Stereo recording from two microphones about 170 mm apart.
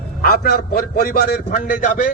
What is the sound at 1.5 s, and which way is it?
Speech, 50° left (ahead or behind).